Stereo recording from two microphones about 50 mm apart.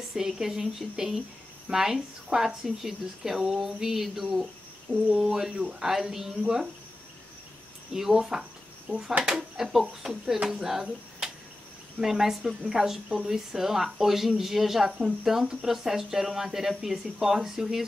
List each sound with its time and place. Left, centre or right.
0.1 s speech: centre
7.9 s speech: centre
8.8 s speech: centre
9.2 s speech: centre